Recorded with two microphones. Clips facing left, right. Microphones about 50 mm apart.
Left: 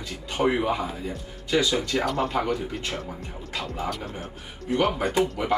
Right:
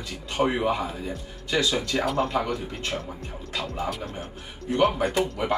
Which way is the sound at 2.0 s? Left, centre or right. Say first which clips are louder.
Right 1 dB; centre.